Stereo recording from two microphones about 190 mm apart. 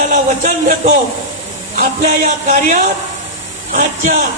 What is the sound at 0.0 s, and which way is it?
A man's voice, 40° right (ahead or behind).